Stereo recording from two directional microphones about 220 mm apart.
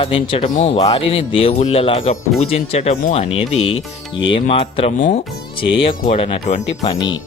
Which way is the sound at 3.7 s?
60° left (ahead or behind).